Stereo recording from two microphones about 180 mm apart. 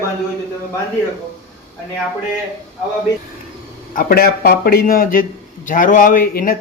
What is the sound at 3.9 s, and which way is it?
A man's voice, 55° left (ahead or behind).